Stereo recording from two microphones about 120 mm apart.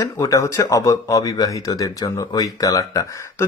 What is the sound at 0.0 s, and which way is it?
Speech, 30° left (ahead or behind).